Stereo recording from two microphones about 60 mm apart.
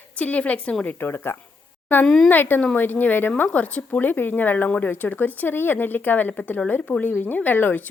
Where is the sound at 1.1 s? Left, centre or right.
Left.